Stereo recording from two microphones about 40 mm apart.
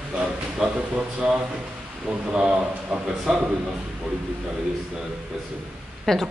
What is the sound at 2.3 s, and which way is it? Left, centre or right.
Speech, right.